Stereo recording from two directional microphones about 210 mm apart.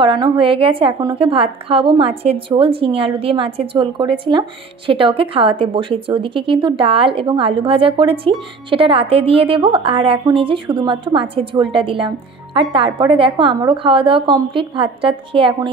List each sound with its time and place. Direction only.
0.0 s a woman's voice: 25° right (ahead or behind)